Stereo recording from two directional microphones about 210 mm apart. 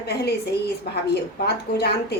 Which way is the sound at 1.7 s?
50° left (ahead or behind).